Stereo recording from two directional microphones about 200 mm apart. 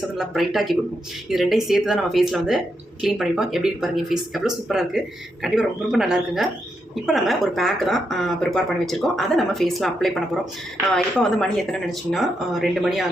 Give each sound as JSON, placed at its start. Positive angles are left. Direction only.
{"t": 0.2, "sound": "speech", "side_deg": 0}